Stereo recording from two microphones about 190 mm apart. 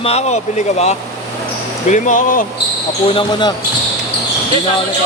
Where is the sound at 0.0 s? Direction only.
35° left (ahead or behind).